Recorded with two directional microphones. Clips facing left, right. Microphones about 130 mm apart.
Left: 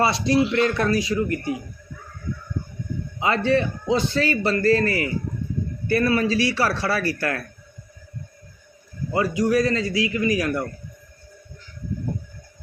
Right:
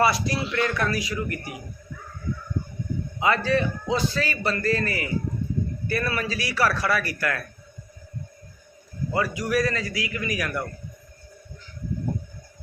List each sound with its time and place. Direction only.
0.0 s a man's voice: 25° left (ahead or behind)
3.2 s a man's voice: 30° left (ahead or behind)
9.1 s a man's voice: 25° left (ahead or behind)